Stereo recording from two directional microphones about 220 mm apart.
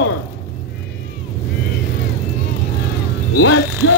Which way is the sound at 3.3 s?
65° left (ahead or behind).